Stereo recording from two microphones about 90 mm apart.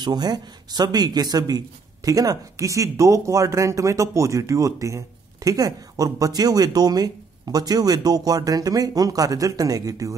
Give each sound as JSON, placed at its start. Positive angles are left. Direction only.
{"t": 0.0, "sound": "speech", "side_deg": -50}